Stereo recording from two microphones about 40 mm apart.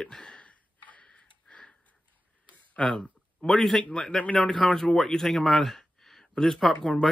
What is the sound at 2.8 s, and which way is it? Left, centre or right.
Speech, left.